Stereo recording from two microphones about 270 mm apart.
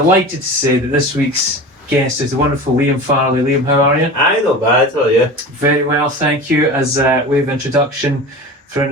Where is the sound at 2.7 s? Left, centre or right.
Right.